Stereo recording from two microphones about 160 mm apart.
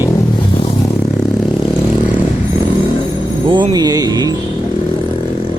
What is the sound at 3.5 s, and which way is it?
Speech, 30° right (ahead or behind).